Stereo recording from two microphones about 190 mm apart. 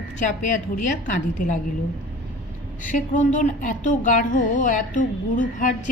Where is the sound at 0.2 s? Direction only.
40° left (ahead or behind).